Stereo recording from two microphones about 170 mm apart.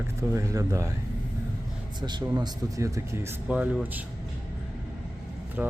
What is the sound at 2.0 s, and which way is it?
Speech, 25° right (ahead or behind).